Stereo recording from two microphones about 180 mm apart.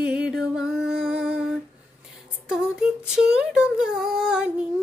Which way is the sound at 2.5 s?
5° right (ahead or behind).